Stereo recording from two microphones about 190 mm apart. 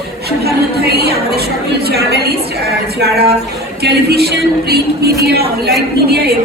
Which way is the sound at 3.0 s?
55° right (ahead or behind).